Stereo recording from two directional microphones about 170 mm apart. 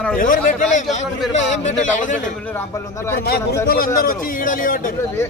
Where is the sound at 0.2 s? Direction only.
50° left (ahead or behind).